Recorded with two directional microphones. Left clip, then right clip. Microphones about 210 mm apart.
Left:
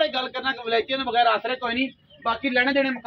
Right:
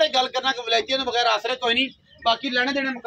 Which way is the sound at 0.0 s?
15° right (ahead or behind).